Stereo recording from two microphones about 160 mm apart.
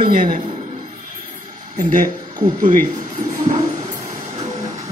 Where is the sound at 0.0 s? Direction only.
60° right (ahead or behind).